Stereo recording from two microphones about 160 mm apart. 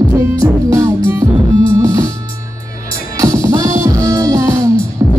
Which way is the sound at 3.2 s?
20° right (ahead or behind).